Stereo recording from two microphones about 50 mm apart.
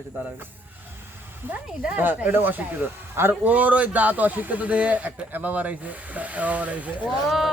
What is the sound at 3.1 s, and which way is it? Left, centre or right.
Speech, right.